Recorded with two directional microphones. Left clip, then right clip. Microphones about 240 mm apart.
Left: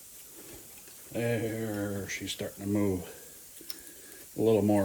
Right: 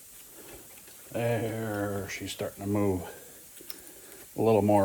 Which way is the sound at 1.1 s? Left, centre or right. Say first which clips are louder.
Right 2 dB; right.